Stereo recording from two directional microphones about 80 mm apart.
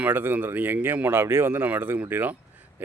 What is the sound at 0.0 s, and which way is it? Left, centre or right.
Speech, right.